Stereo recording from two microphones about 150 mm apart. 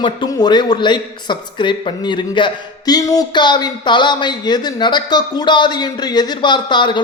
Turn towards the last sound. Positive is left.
turn(degrees=30)  # may be behind; listen again after turning